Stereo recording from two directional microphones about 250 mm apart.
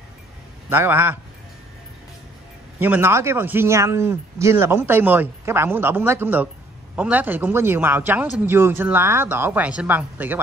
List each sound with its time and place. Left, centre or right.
0.7 s speech: centre
2.8 s speech: centre